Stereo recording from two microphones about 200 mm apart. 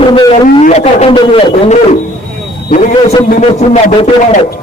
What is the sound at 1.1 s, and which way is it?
A man's voice, 25° left (ahead or behind).